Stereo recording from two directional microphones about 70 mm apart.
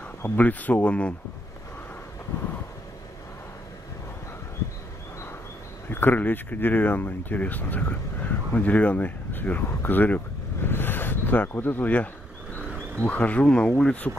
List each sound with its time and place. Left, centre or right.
0.4 s speech: left
5.9 s speech: left; by 14.1 s centre